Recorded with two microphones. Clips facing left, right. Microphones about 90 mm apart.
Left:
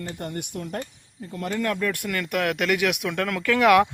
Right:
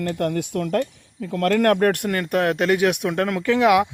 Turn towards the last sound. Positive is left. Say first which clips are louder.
# right 1 dB
turn(degrees=-20)  # may be behind; listen again after turning